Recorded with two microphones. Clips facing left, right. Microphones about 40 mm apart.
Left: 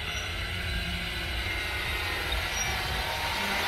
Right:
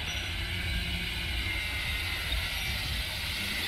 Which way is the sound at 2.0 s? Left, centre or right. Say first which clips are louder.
Left 3 dB; left.